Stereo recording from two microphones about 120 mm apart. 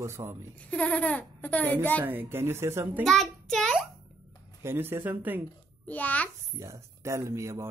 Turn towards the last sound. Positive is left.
turn(degrees=-25)  # may be behind; listen again after turning